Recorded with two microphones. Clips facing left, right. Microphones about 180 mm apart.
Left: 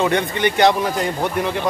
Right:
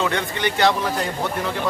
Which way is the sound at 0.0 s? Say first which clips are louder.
Left 5 dB; 20° left (ahead or behind).